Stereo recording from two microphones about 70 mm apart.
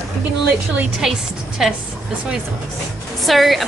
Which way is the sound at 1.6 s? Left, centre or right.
Centre.